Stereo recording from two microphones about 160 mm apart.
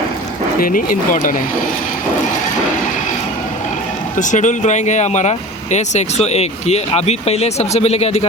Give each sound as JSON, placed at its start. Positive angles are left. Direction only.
{"t": 0.6, "sound": "speech", "side_deg": 60}
{"t": 4.2, "sound": "speech", "side_deg": 50}